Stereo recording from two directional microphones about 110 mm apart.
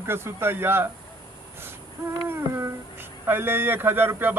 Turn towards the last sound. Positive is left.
turn(degrees=-20)  # may be behind; listen again after turning